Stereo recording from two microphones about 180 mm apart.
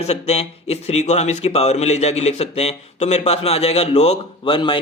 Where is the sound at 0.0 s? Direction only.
35° left (ahead or behind).